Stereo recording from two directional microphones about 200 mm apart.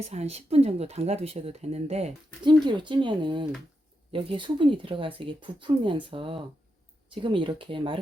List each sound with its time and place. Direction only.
0.0 s speech: 35° right (ahead or behind)